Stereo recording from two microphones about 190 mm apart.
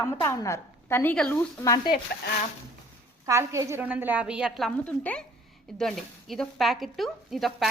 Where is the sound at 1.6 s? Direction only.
20° left (ahead or behind).